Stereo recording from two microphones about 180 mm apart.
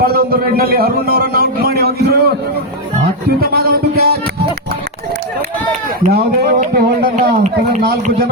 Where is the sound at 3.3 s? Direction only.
60° right (ahead or behind).